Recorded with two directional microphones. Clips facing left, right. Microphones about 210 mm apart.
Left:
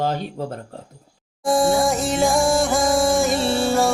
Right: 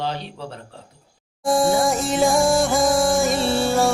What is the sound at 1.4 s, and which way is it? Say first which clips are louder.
Music: even; centre (ahead or behind).